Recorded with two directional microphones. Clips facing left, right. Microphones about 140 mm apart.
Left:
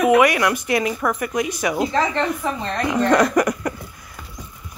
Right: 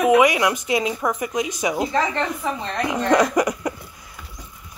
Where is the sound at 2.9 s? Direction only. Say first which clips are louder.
Left 2 dB; 15° right (ahead or behind).